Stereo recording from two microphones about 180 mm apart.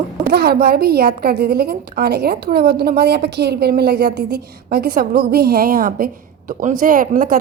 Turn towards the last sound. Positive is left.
turn(degrees=-50)  # may be behind; listen again after turning